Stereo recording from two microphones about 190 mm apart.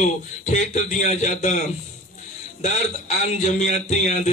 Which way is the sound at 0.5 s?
35° left (ahead or behind).